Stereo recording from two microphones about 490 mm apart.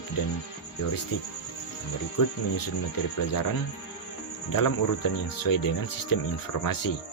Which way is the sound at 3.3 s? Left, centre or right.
Left.